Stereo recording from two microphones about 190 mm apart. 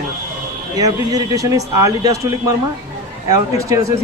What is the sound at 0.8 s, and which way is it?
Speech, 20° right (ahead or behind).